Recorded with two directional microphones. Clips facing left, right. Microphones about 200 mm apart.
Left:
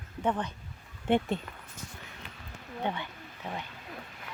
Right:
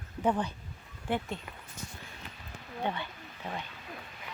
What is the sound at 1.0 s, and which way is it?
Speech, 25° left (ahead or behind).